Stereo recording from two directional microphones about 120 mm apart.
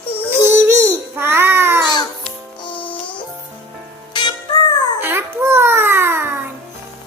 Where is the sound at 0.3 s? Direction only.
20° right (ahead or behind).